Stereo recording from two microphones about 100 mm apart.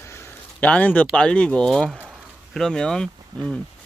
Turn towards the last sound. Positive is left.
turn(degrees=-45)  # may be behind; listen again after turning